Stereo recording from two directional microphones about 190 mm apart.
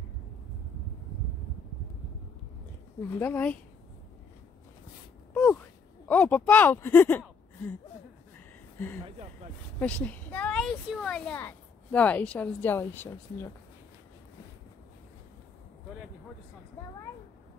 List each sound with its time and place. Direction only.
3.2 s speech: 10° left (ahead or behind)
5.3 s a sound: 10° left (ahead or behind)
8.7 s speech: 10° left (ahead or behind)